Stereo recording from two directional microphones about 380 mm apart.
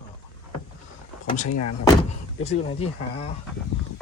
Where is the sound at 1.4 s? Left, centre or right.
Left.